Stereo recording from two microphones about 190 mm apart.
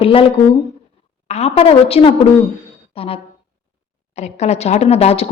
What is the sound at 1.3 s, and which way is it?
A woman's voice, 35° left (ahead or behind).